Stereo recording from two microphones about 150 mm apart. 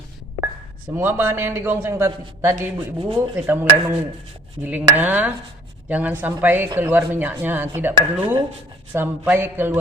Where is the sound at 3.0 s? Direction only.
35° right (ahead or behind).